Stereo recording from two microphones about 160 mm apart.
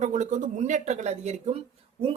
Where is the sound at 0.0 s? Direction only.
50° right (ahead or behind).